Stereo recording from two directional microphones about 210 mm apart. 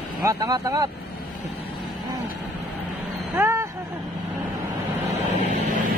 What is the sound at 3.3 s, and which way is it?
Vehicle, 15° right (ahead or behind).